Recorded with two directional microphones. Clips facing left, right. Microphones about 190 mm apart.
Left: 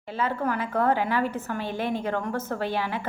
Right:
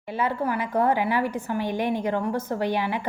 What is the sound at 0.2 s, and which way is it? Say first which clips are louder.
A woman's voice: right 1 dB; 15° right (ahead or behind).